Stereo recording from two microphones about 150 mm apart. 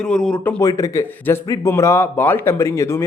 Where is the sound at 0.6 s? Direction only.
20° left (ahead or behind).